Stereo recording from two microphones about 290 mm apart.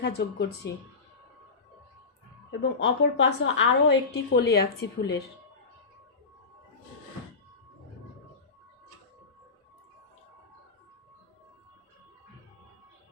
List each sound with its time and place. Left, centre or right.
0.0 s a woman's voice: left
2.5 s a woman's voice: left